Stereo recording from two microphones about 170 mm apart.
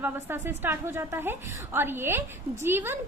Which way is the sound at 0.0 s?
10° right (ahead or behind).